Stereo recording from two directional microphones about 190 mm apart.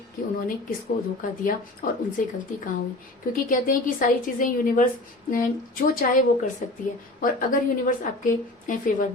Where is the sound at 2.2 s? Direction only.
45° left (ahead or behind).